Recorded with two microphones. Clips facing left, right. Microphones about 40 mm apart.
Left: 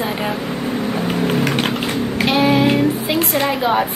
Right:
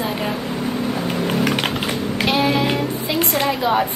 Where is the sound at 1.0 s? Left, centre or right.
Centre.